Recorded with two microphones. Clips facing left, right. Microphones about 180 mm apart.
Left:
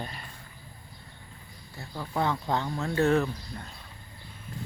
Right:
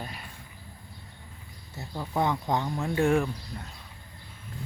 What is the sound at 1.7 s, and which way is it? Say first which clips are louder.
Speech: right 2 dB; 15° right (ahead or behind).